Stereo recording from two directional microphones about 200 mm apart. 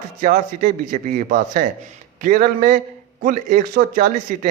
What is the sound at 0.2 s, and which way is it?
A man's voice, 40° right (ahead or behind).